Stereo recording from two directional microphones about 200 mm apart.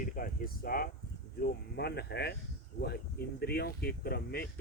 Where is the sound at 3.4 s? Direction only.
50° left (ahead or behind).